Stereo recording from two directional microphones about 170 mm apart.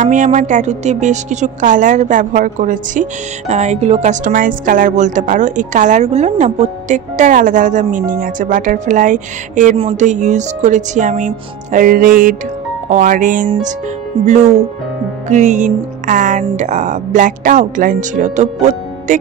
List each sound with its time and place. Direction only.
0.0 s a woman's voice: 45° right (ahead or behind)